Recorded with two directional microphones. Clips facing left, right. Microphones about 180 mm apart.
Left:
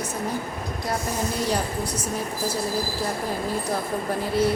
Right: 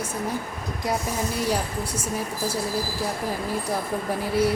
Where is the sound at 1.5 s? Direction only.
10° right (ahead or behind).